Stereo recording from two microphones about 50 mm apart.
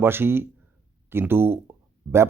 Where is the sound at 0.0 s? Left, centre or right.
Right.